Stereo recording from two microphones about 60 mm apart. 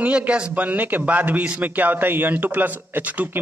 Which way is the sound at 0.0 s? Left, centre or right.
Right.